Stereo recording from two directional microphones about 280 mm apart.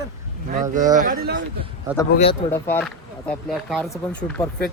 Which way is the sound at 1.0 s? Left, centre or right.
Right.